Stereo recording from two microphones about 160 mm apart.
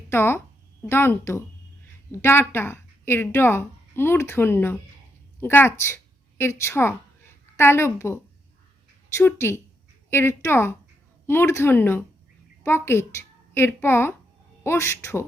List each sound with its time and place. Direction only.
0.1 s a woman's voice: 15° left (ahead or behind)